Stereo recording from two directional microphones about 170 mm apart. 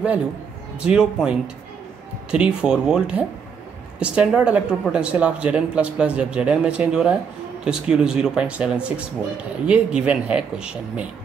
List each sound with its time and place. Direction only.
0.7 s speech: 5° right (ahead or behind)